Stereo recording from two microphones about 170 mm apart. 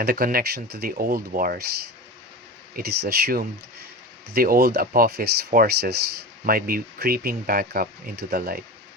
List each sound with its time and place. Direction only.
0.0 s speech: 60° right (ahead or behind)
2.7 s speech: 60° right (ahead or behind)